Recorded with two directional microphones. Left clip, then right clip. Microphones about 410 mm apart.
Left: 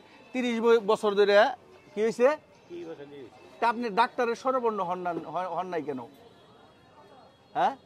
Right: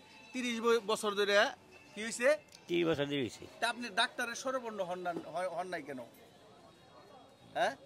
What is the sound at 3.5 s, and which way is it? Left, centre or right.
A man's voice, left.